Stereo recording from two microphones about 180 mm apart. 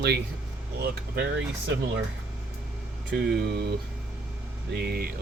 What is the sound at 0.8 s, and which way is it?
Speech, 65° right (ahead or behind).